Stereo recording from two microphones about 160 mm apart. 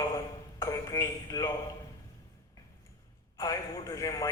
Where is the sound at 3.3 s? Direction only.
20° left (ahead or behind).